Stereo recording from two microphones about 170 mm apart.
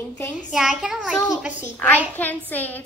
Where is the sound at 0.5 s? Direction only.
Centre (ahead or behind).